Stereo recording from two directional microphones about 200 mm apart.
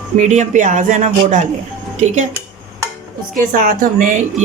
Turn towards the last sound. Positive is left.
turn(degrees=-40)  # may be behind; listen again after turning